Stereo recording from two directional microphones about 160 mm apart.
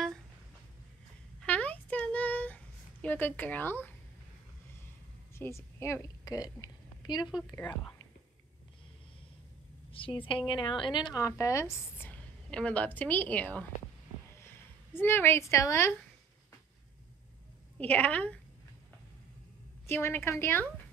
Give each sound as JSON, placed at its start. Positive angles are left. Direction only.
{"t": 1.4, "sound": "a sound", "side_deg": 10}
{"t": 5.3, "sound": "a woman's voice", "side_deg": 15}
{"t": 9.8, "sound": "a sound", "side_deg": 35}
{"t": 10.2, "sound": "speech", "side_deg": 30}
{"t": 15.0, "sound": "a woman's voice", "side_deg": 15}
{"t": 17.7, "sound": "a woman's voice", "side_deg": 10}
{"t": 19.9, "sound": "a woman's voice", "side_deg": 15}